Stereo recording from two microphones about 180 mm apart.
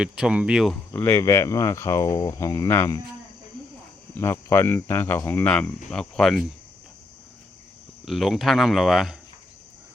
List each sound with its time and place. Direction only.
0.0 s speech: 5° right (ahead or behind)
0.9 s speech: 15° left (ahead or behind)
4.2 s speech: 15° left (ahead or behind)
8.0 s speech: centre (ahead or behind)